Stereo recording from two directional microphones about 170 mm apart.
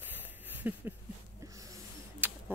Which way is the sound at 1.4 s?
20° right (ahead or behind).